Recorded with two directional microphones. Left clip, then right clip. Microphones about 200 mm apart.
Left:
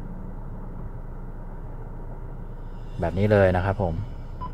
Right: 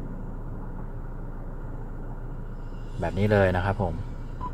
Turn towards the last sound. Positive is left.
turn(degrees=15)  # may be behind; listen again after turning